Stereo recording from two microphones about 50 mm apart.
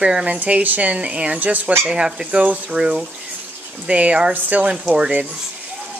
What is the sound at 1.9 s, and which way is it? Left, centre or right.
Speech, centre.